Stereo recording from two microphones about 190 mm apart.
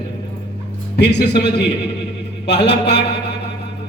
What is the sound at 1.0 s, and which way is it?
A man's voice, 65° left (ahead or behind).